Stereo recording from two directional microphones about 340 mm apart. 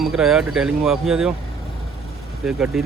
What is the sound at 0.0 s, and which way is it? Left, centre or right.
Speech, centre.